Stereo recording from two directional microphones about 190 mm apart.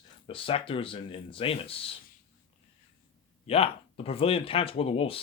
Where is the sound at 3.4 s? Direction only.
30° left (ahead or behind).